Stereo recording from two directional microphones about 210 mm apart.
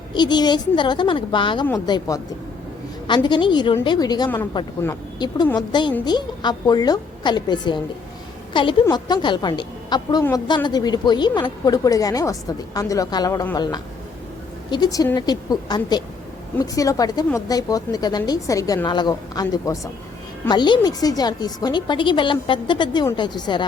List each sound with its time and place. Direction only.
0.1 s a woman's voice: 20° left (ahead or behind)